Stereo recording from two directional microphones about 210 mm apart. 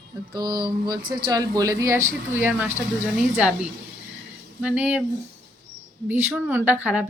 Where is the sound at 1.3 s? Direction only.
15° right (ahead or behind).